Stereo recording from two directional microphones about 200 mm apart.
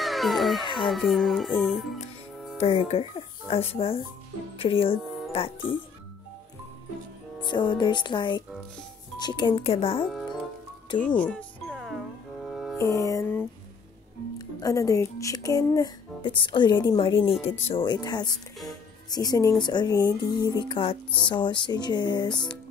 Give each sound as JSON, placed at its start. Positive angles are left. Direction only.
{"t": 0.0, "sound": "speech", "side_deg": 0}
{"t": 2.6, "sound": "speech", "side_deg": 30}
{"t": 7.4, "sound": "speech", "side_deg": 20}
{"t": 11.0, "sound": "music", "side_deg": 5}
{"t": 12.7, "sound": "music", "side_deg": 15}
{"t": 14.6, "sound": "speech", "side_deg": 15}